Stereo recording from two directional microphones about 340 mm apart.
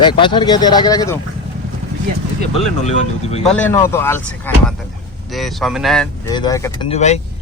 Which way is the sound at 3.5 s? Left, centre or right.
Centre.